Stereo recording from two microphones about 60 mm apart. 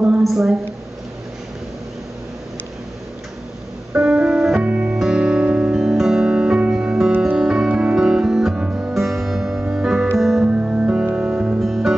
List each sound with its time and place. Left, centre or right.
0.2 s a woman's voice: centre
3.9 s music: centre
4.6 s music: right
4.9 s music: centre
8.9 s music: centre
11.6 s music: centre